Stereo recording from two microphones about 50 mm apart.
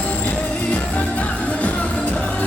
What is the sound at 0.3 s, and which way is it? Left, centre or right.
Music, left.